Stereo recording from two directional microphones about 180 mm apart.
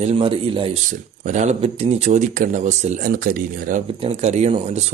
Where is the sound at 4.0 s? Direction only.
35° right (ahead or behind).